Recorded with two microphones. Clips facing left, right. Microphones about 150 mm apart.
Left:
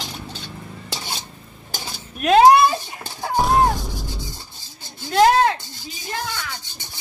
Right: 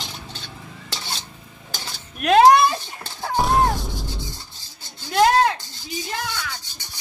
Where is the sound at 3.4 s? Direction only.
Centre (ahead or behind).